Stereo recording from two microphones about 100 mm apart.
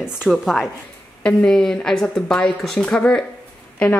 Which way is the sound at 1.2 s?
10° left (ahead or behind).